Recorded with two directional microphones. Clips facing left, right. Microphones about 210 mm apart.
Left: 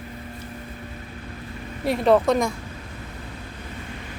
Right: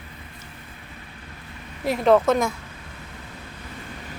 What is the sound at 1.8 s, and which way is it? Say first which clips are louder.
Speech: even; centre (ahead or behind).